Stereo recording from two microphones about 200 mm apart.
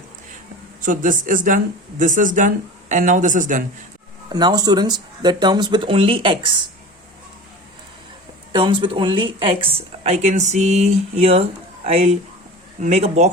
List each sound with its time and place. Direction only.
0.8 s speech: 40° right (ahead or behind)
4.3 s speech: 20° right (ahead or behind)
8.5 s speech: 25° right (ahead or behind)